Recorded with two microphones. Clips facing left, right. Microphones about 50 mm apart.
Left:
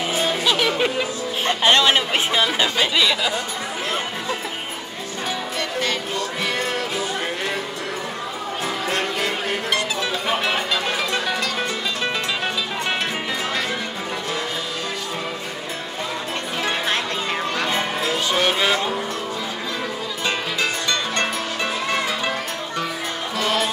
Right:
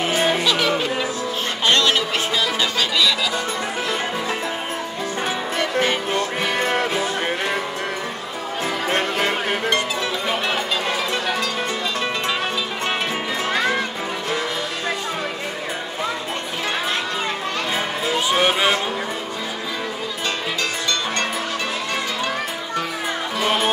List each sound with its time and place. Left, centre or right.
0.0 s music: right
1.6 s music: centre
5.6 s music: right
8.8 s music: right
17.7 s music: centre